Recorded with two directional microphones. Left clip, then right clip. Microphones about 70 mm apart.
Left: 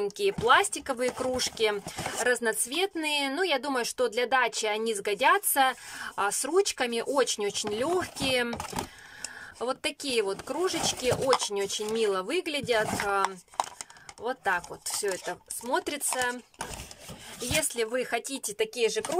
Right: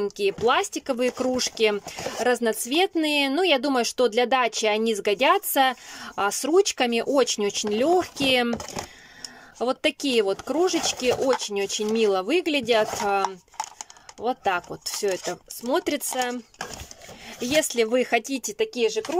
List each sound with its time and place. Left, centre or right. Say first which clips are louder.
0.0 s speech: right 3 dB; centre
0.5 s speech: left 2 dB; right
2.1 s speech: right 4 dB; right
9.6 s speech: right 7 dB; right
14.2 s speech: right 4 dB; right
15.6 s speech: right 5 dB; right
17.4 s speech: right 7 dB; right